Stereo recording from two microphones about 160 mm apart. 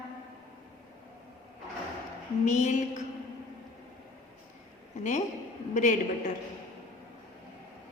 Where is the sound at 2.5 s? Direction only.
50° left (ahead or behind).